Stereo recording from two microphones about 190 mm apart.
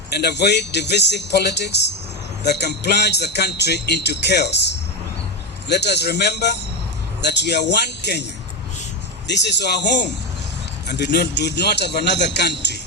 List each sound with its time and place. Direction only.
0.1 s speech: 60° left (ahead or behind)